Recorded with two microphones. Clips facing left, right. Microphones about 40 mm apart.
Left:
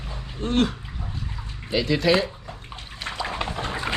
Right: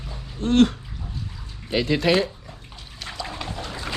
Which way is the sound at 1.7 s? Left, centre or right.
Right.